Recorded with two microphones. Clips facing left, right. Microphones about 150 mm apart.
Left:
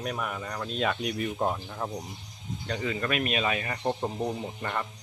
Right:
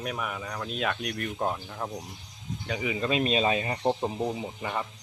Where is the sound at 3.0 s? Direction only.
25° right (ahead or behind).